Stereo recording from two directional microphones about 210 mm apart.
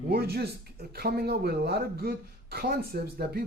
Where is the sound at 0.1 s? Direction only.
50° right (ahead or behind).